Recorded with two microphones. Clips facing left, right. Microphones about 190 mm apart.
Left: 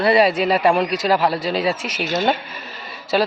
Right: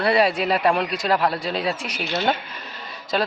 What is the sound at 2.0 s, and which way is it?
Speech, 45° left (ahead or behind).